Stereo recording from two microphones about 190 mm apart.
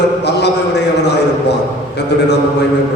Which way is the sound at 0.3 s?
60° left (ahead or behind).